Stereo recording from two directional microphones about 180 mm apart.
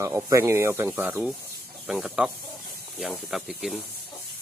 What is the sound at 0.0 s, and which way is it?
Speech, 15° right (ahead or behind).